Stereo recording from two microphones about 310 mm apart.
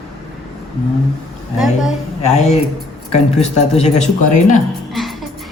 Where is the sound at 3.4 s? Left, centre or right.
Left.